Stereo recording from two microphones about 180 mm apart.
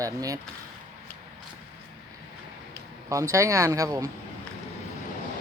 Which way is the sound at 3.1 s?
15° right (ahead or behind).